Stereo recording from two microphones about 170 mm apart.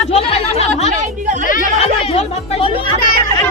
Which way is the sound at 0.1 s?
35° left (ahead or behind).